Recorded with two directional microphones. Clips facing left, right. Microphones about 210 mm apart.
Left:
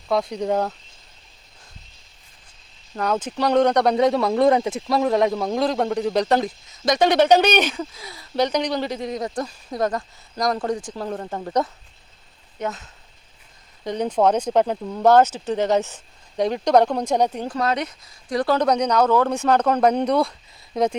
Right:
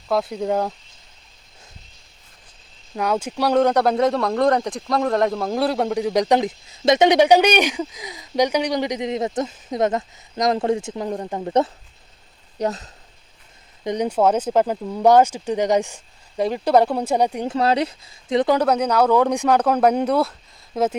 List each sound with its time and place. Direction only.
0.1 s speech: 5° right (ahead or behind)
2.9 s a man's voice: 10° right (ahead or behind)
12.5 s speech: 35° right (ahead or behind)
13.8 s a man's voice: 15° right (ahead or behind)
17.5 s speech: 30° right (ahead or behind)
18.6 s a man's voice: 5° right (ahead or behind)